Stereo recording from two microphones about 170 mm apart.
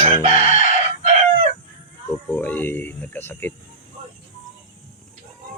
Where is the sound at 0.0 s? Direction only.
35° right (ahead or behind).